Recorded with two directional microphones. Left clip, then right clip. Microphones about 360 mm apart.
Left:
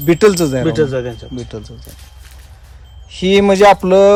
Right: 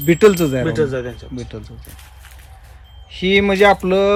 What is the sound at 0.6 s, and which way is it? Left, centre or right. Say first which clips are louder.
Speech: left 4 dB; left.